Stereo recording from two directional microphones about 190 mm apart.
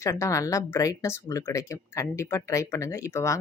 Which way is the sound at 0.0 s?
15° left (ahead or behind).